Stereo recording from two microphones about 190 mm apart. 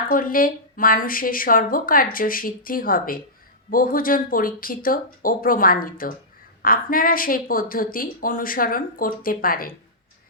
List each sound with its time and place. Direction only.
0.1 s a woman's voice: 45° left (ahead or behind)